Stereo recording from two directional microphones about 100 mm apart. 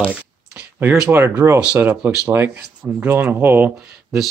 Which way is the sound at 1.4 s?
15° right (ahead or behind).